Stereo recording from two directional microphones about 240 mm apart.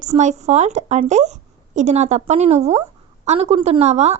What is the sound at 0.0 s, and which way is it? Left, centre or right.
Speech, right.